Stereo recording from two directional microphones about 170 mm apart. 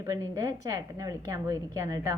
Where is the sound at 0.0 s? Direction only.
20° right (ahead or behind).